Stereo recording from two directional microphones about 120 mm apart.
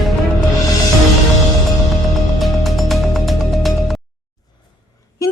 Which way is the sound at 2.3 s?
Centre (ahead or behind).